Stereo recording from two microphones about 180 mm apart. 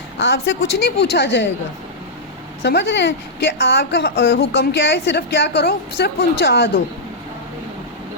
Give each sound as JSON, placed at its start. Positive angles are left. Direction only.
{"t": 0.2, "sound": "a woman's voice", "side_deg": 75}
{"t": 2.6, "sound": "a woman's voice", "side_deg": 70}